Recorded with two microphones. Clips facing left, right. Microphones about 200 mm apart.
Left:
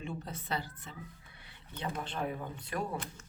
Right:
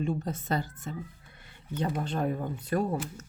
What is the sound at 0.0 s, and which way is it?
Speech, 45° right (ahead or behind).